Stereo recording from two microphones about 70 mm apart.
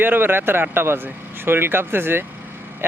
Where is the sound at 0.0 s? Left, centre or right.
Right.